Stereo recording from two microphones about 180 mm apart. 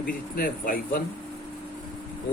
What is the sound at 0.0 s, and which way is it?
Speech, 50° left (ahead or behind).